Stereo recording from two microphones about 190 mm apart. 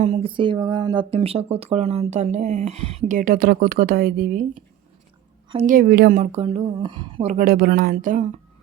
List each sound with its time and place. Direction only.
0.0 s speech: 30° right (ahead or behind); by 4.4 s 50° right (ahead or behind)
5.6 s speech: 50° right (ahead or behind)
6.1 s speech: 35° right (ahead or behind)
7.3 s speech: 50° right (ahead or behind)